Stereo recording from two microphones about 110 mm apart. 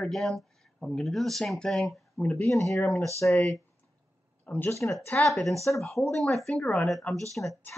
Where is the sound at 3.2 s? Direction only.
15° left (ahead or behind).